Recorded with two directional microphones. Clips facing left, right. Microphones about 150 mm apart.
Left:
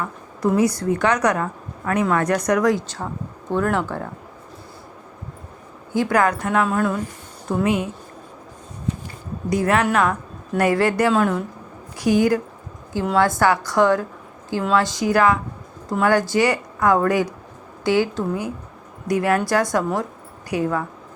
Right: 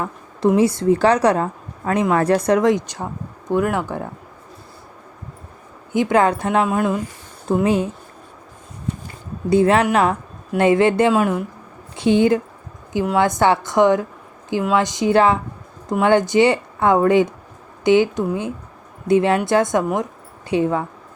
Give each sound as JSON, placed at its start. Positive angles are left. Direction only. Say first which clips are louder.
{"t": 0.0, "sound": "a woman's voice", "louder": "right 4 dB", "side_deg": -30}
{"t": 5.9, "sound": "a woman's voice", "louder": "right 3 dB", "side_deg": -20}
{"t": 6.7, "sound": "speech", "louder": "right 2 dB", "side_deg": -15}
{"t": 7.4, "sound": "speech", "louder": "right 3 dB", "side_deg": -30}
{"t": 9.5, "sound": "a woman's voice", "louder": "right 4 dB", "side_deg": -25}
{"t": 11.1, "sound": "speech", "louder": "right 1 dB", "side_deg": -10}
{"t": 11.9, "sound": "a woman's voice", "louder": "right 2 dB", "side_deg": -25}